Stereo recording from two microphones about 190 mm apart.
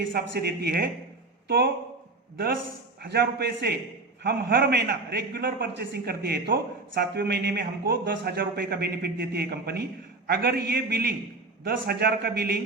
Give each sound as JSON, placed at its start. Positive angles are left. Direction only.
{"t": 0.1, "sound": "a man's voice", "side_deg": -55}
{"t": 3.0, "sound": "a man's voice", "side_deg": -55}